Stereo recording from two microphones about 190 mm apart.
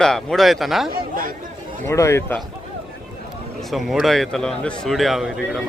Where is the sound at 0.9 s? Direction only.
50° right (ahead or behind).